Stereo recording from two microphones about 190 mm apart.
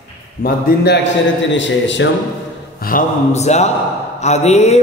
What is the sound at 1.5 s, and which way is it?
Speech, 70° left (ahead or behind).